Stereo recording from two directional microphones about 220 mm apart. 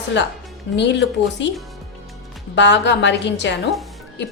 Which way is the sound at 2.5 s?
55° left (ahead or behind).